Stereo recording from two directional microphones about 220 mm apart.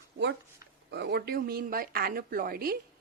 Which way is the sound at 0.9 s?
50° right (ahead or behind).